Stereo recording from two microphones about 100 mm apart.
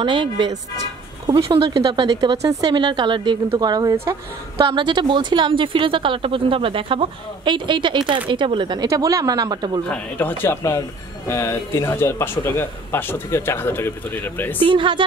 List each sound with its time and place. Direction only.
0.0 s speech: 55° right (ahead or behind)
1.2 s speech: 40° right (ahead or behind)
1.6 s speech: 60° right (ahead or behind)
2.4 s speech: 35° right (ahead or behind)
2.7 s a woman's voice: 50° right (ahead or behind)
3.9 s speech: 25° right (ahead or behind)
4.6 s speech: 55° right (ahead or behind)
8.8 s speech: 35° right (ahead or behind)
9.8 s speech: 20° left (ahead or behind)
14.6 s speech: 55° right (ahead or behind)